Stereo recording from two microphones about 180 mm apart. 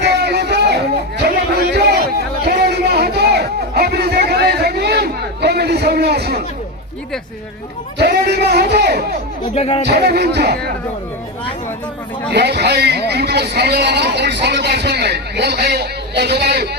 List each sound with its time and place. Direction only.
0.0 s a sound: 70° right (ahead or behind)
7.9 s a man's voice: 65° right (ahead or behind)
9.4 s speech: 30° left (ahead or behind)
9.8 s a man's voice: 65° right (ahead or behind)
12.3 s a man's voice: 65° right (ahead or behind)